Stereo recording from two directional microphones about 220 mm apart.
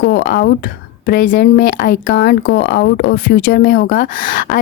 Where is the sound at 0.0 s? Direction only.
45° left (ahead or behind).